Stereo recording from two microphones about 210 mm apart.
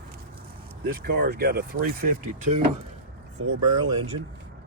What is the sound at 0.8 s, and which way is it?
Speech, 50° right (ahead or behind).